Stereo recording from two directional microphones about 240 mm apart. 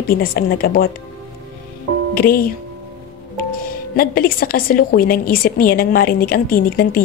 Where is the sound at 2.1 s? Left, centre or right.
Left.